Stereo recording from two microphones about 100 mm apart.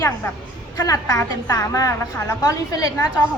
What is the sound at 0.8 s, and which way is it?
A woman's voice, 35° left (ahead or behind).